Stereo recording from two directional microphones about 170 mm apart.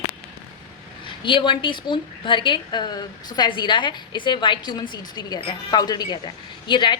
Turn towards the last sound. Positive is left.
turn(degrees=25)  # may be behind; listen again after turning